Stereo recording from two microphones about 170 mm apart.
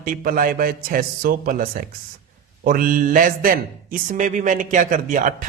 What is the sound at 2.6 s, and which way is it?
Speech, 55° right (ahead or behind).